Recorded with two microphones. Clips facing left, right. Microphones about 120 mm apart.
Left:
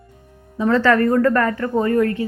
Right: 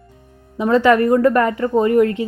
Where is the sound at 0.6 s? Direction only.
15° right (ahead or behind).